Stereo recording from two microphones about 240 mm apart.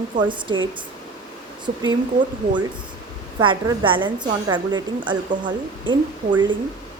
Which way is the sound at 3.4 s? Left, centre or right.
Centre.